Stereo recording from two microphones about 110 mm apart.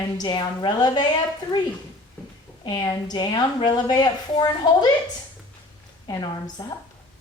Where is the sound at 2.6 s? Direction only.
40° left (ahead or behind).